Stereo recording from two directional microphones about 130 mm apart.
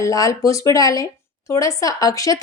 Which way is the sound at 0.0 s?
25° left (ahead or behind).